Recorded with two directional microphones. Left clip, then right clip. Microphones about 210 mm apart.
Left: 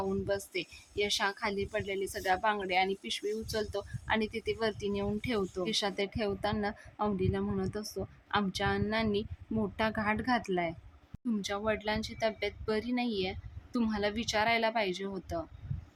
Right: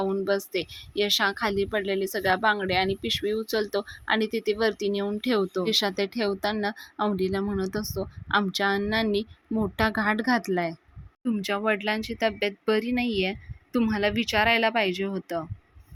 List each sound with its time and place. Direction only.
0.0 s a woman's voice: 20° right (ahead or behind)